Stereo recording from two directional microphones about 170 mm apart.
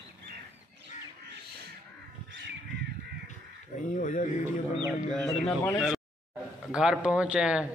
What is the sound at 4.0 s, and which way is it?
Mantra, 50° left (ahead or behind).